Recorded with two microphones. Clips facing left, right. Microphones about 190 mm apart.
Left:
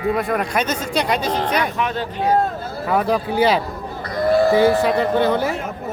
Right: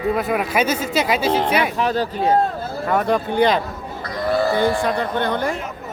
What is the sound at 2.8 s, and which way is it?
Speech, 5° left (ahead or behind).